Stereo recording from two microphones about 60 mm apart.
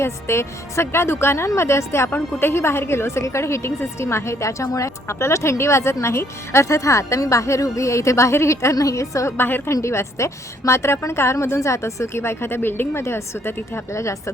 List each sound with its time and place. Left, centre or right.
0.0 s a woman's voice: left
8.7 s a woman's voice: left
9.4 s a woman's voice: left
9.8 s a woman's voice: left
13.9 s a woman's voice: left